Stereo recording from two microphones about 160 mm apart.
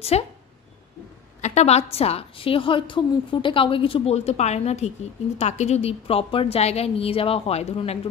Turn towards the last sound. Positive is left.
turn(degrees=40)  # may be behind; listen again after turning